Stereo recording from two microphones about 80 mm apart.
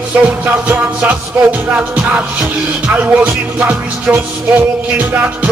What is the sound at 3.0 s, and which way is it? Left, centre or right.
Music, centre.